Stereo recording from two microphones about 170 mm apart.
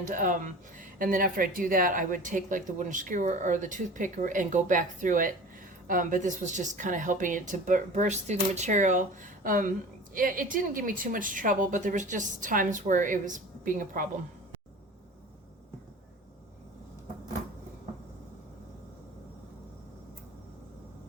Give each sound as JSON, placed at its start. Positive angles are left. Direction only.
{"t": 0.0, "sound": "speech", "side_deg": -50}